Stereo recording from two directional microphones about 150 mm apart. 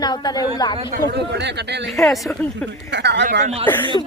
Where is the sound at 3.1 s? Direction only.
60° right (ahead or behind).